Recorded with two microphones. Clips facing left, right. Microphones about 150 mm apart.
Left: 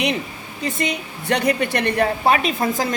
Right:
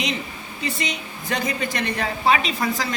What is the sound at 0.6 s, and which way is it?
A woman's voice, 50° left (ahead or behind).